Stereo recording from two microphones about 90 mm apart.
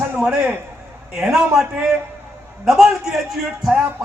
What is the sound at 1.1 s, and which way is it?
Speech, centre (ahead or behind).